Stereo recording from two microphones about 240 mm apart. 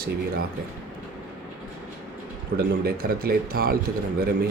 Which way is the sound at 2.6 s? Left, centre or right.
Right.